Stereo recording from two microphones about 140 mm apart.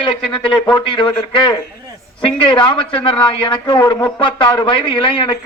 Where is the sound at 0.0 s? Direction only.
35° left (ahead or behind).